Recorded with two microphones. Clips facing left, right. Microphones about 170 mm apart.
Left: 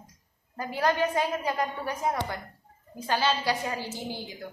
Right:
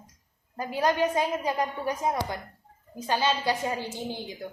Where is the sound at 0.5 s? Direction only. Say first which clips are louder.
Right 1 dB; 15° right (ahead or behind).